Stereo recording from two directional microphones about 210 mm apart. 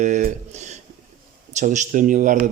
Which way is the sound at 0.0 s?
40° right (ahead or behind).